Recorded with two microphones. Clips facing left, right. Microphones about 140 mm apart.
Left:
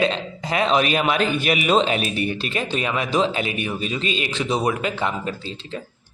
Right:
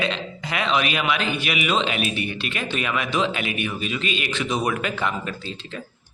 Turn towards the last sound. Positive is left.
turn(degrees=30)  # may be behind; listen again after turning